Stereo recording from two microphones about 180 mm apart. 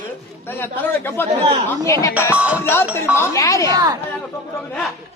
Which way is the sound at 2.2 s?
10° right (ahead or behind).